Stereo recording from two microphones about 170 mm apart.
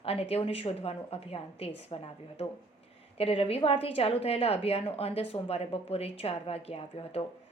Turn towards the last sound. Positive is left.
turn(degrees=35)  # may be behind; listen again after turning